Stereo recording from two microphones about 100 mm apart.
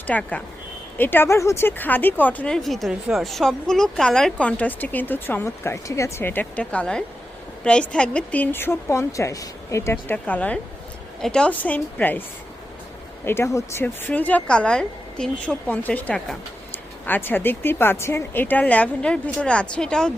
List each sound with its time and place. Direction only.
0.1 s a woman's voice: 15° left (ahead or behind)
2.6 s a woman's voice: centre (ahead or behind); by 12.2 s 15° left (ahead or behind)
13.2 s speech: 25° left (ahead or behind)
13.8 s a woman's voice: 15° left (ahead or behind)